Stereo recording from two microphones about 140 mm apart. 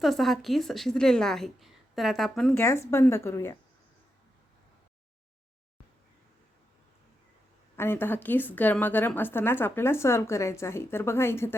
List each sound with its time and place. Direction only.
0.0 s a woman's voice: centre (ahead or behind)
2.6 s a woman's voice: 20° left (ahead or behind)
7.8 s a woman's voice: 15° left (ahead or behind)